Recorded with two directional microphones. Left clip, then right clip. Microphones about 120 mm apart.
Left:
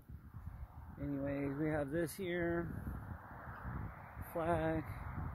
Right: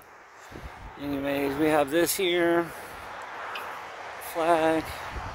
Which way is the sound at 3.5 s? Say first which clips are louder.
Right 15 dB; 15° right (ahead or behind).